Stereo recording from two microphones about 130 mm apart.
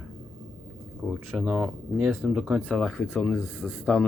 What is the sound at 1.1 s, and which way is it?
Speech, 10° right (ahead or behind).